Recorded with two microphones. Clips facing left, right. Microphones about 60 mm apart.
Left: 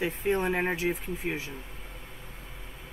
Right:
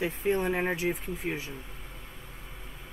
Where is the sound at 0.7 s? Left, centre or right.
Centre.